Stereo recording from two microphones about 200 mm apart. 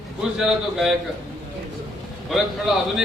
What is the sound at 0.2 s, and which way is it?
Speech, 5° right (ahead or behind).